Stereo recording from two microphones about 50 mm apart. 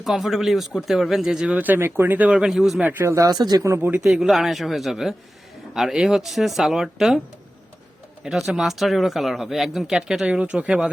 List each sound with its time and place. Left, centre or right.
0.0 s speech: centre
1.5 s speech: right
2.5 s speech: centre
3.0 s speech: right
3.8 s speech: right
4.0 s speech: centre
8.2 s speech: centre
10.2 s speech: right